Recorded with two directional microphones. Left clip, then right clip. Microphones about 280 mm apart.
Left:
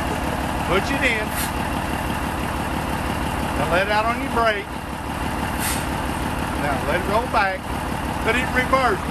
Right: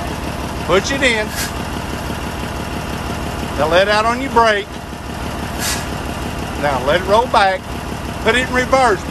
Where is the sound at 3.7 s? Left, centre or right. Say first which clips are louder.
Right 7 dB; right.